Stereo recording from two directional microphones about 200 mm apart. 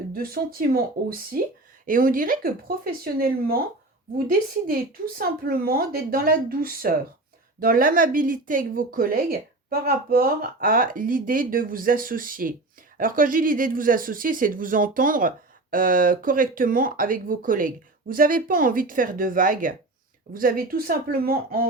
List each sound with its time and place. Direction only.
0.1 s speech: 45° right (ahead or behind)